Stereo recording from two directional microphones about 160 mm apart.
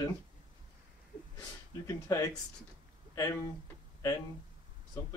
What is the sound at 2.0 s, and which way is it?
Speech, 20° left (ahead or behind).